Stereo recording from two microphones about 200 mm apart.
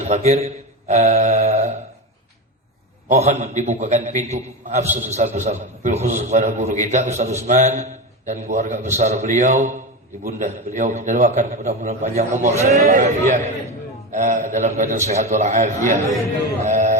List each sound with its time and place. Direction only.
0.0 s a man's voice: 35° right (ahead or behind)
3.1 s a man's voice: 35° right (ahead or behind)
16.6 s music: 40° right (ahead or behind)